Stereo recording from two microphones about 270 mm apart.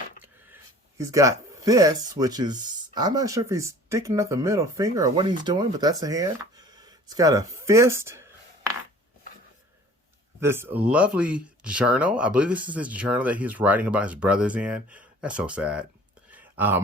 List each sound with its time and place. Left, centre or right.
0.9 s speech: centre
10.4 s speech: centre
16.3 s a sound: centre